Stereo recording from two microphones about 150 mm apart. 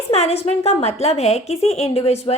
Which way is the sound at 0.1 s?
45° left (ahead or behind).